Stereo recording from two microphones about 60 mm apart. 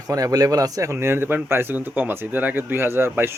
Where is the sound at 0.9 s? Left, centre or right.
Right.